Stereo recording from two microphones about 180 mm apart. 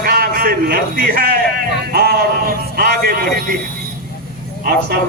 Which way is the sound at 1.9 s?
60° right (ahead or behind).